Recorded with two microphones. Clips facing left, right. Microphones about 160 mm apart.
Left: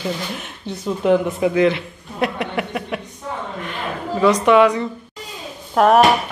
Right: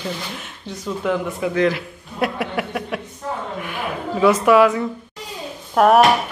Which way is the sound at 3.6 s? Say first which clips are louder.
Even; 10° right (ahead or behind).